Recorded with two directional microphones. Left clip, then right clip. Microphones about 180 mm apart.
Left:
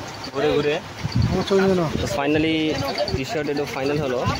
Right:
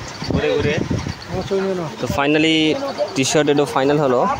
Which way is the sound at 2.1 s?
15° right (ahead or behind).